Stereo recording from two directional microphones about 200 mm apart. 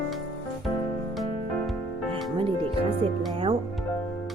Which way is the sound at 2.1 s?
25° right (ahead or behind).